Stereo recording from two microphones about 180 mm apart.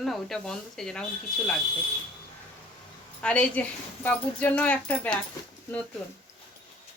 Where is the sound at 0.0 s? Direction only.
5° left (ahead or behind).